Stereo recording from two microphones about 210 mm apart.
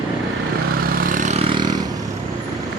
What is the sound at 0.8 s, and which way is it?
Vehicle, 40° right (ahead or behind).